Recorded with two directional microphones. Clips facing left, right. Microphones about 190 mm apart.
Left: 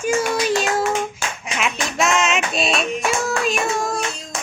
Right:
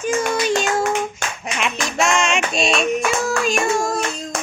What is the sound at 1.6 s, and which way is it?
Clapping, centre (ahead or behind).